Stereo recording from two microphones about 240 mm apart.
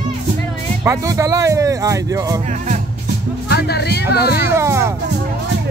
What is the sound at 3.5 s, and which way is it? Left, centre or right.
Music, left.